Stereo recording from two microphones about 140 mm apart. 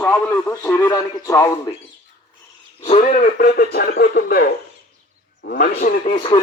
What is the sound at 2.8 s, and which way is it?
Speech, 50° left (ahead or behind).